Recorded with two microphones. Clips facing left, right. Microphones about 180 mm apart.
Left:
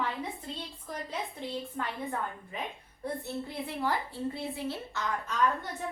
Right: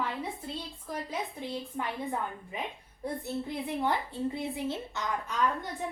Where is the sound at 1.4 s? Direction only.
15° right (ahead or behind).